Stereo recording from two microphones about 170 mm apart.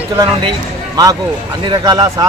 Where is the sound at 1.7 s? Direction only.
25° right (ahead or behind).